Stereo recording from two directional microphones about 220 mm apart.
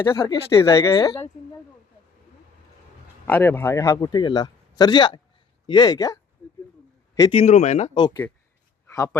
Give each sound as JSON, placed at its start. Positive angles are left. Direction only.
{"t": 0.0, "sound": "speech", "side_deg": 20}
{"t": 3.2, "sound": "speech", "side_deg": 10}
{"t": 7.2, "sound": "speech", "side_deg": 25}
{"t": 8.0, "sound": "speech", "side_deg": 15}